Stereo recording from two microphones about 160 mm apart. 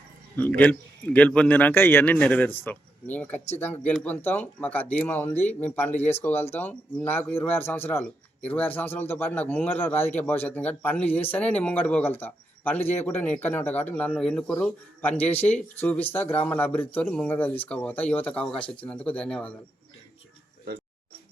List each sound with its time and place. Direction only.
0.3 s a man's voice: 10° left (ahead or behind)
5.3 s speech: 45° left (ahead or behind)
5.5 s a man's voice: 10° left (ahead or behind)